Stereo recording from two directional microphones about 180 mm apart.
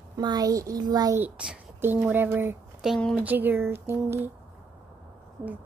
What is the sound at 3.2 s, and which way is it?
Speech, 10° right (ahead or behind).